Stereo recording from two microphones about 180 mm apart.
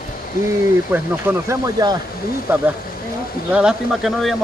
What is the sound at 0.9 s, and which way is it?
Speech, 15° right (ahead or behind).